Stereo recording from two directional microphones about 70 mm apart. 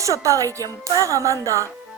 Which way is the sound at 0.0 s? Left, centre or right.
Right.